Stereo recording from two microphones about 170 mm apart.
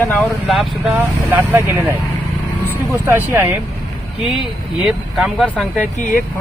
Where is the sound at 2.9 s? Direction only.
15° right (ahead or behind).